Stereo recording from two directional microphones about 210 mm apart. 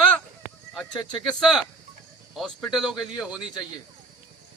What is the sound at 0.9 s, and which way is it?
Speech, 20° left (ahead or behind).